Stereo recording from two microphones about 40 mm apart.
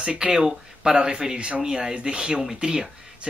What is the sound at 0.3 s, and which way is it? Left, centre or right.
Speech, centre.